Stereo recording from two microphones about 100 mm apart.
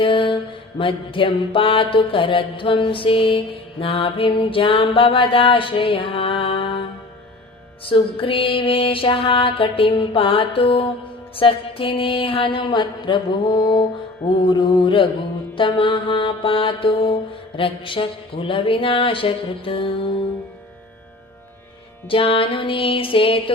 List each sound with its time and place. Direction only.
0.0 s mantra: 55° left (ahead or behind)
7.9 s mantra: 60° left (ahead or behind)
22.1 s mantra: 65° left (ahead or behind)